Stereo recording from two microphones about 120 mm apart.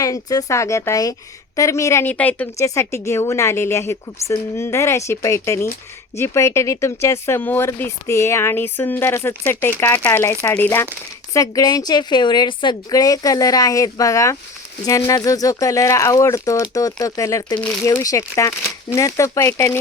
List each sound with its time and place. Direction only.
0.0 s speech: 30° left (ahead or behind); by 2.5 s 15° left (ahead or behind)
2.6 s speech: 25° left (ahead or behind)
11.3 s a woman's voice: 30° left (ahead or behind)